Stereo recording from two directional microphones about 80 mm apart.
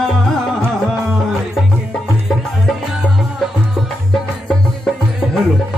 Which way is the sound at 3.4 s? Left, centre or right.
Centre.